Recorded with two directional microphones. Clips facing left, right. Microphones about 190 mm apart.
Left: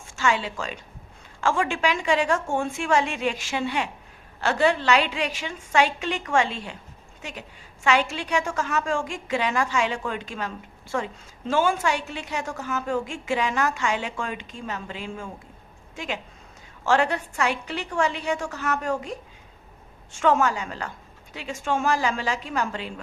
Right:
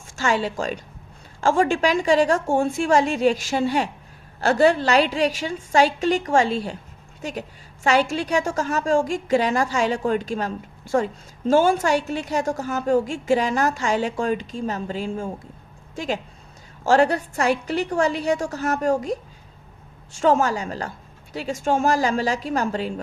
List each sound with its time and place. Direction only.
0.2 s a woman's voice: 40° right (ahead or behind)
20.1 s a woman's voice: 35° right (ahead or behind)